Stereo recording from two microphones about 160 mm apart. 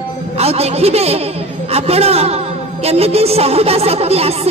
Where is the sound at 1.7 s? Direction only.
40° right (ahead or behind).